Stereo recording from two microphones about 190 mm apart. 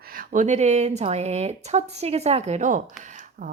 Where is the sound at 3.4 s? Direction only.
45° right (ahead or behind).